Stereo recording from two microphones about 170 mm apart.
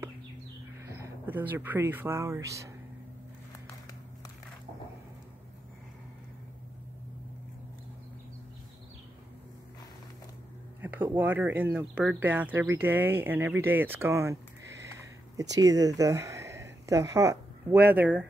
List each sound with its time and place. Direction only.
0.8 s speech: 15° right (ahead or behind)
10.8 s speech: 10° right (ahead or behind)
14.9 s a sound: 20° right (ahead or behind)